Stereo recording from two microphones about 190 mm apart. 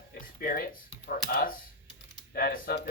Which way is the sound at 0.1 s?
50° left (ahead or behind).